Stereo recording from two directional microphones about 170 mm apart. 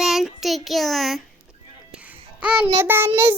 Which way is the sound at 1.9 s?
5° right (ahead or behind).